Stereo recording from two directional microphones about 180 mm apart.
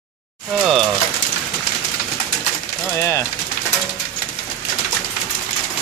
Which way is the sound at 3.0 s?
15° left (ahead or behind).